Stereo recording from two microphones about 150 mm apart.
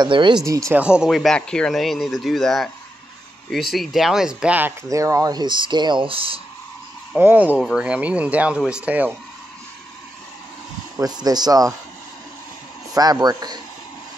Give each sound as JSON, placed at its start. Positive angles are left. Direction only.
{"t": 0.0, "sound": "speech", "side_deg": -30}
{"t": 0.7, "sound": "speech", "side_deg": -5}
{"t": 7.2, "sound": "speech", "side_deg": -10}
{"t": 11.0, "sound": "speech", "side_deg": -25}
{"t": 12.9, "sound": "speech", "side_deg": -25}